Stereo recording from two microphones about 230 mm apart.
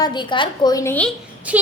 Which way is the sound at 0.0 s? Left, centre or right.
Centre.